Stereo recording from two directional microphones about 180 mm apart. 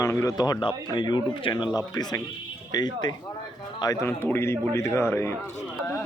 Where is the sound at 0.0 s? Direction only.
15° left (ahead or behind).